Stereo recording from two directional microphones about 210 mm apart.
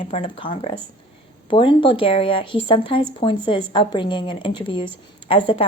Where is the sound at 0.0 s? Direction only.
25° left (ahead or behind).